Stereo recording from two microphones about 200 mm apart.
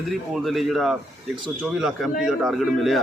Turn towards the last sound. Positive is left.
turn(degrees=0)  # may be behind; listen again after turning